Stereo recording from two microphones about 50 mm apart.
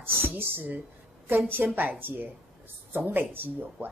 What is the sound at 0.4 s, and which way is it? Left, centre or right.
A woman's voice, right.